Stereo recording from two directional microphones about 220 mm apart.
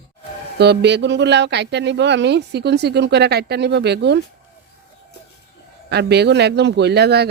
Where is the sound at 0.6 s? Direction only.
50° right (ahead or behind).